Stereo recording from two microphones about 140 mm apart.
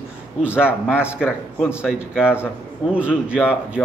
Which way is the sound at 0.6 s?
5° right (ahead or behind).